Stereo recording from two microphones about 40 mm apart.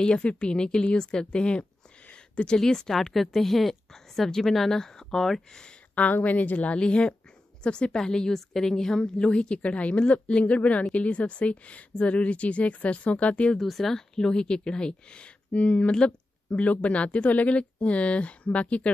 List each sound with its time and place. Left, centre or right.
0.0 s speech: left
2.1 s a sound: left
2.6 s a woman's voice: centre
6.2 s speech: left
6.8 s a woman's voice: left
13.6 s speech: centre; by 18.9 s left